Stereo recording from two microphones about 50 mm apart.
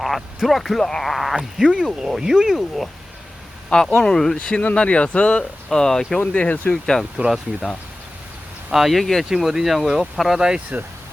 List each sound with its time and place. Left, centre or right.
0.4 s speech: centre
1.1 s speech: centre
3.7 s speech: centre
4.0 s speech: centre
4.4 s speech: centre
5.6 s speech: centre
6.1 s speech: left
7.3 s speech: centre
8.7 s speech: centre
9.3 s speech: centre